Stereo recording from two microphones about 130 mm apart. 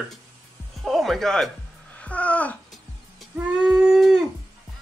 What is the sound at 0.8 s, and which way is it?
Speech, centre (ahead or behind).